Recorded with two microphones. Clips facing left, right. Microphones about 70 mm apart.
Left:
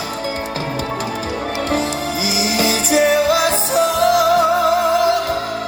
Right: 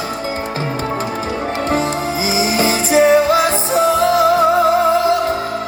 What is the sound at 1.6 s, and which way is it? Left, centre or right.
Music, right.